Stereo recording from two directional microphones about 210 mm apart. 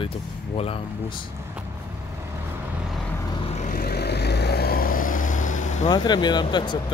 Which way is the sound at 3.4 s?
35° left (ahead or behind).